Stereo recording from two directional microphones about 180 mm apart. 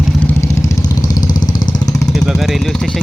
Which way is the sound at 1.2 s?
45° left (ahead or behind).